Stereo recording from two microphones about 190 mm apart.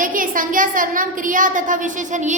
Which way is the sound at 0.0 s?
45° right (ahead or behind).